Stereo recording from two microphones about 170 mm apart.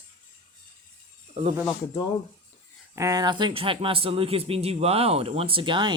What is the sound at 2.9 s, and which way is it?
Speech, 20° right (ahead or behind).